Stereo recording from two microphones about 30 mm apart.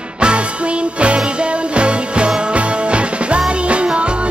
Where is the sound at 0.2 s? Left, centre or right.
Right.